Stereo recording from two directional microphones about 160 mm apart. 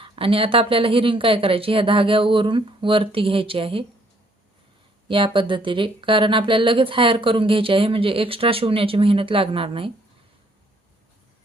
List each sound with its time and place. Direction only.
0.0 s speech: 35° right (ahead or behind)
5.0 s speech: 30° right (ahead or behind)